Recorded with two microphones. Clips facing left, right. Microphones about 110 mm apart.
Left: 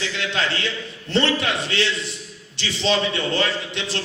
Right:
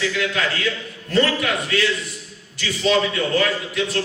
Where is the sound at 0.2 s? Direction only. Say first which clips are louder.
Right 2 dB; 25° left (ahead or behind).